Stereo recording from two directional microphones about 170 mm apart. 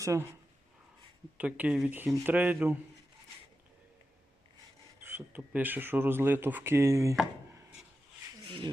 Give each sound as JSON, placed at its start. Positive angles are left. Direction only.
{"t": 0.0, "sound": "speech", "side_deg": -20}
{"t": 1.4, "sound": "speech", "side_deg": -10}
{"t": 5.0, "sound": "speech", "side_deg": -10}
{"t": 8.4, "sound": "speech", "side_deg": -30}